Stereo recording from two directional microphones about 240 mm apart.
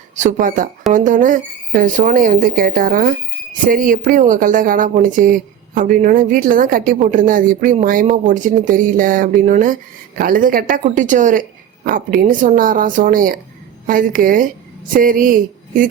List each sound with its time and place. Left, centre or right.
0.2 s speech: right